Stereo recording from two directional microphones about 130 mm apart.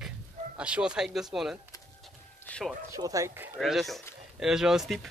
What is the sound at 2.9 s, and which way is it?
Speech, 25° right (ahead or behind).